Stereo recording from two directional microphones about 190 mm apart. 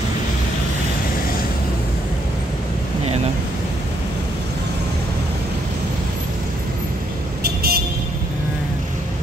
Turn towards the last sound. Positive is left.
turn(degrees=-55)  # may be behind; listen again after turning